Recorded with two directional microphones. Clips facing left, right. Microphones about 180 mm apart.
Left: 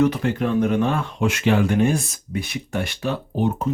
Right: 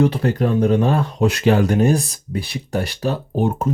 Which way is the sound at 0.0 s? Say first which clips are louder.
Right 2 dB; 35° right (ahead or behind).